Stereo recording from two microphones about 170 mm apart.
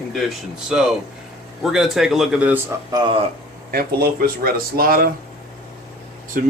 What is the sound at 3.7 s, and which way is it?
Speech, 65° right (ahead or behind).